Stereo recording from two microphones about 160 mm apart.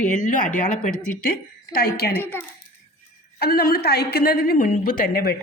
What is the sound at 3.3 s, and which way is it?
A woman's voice, 75° left (ahead or behind).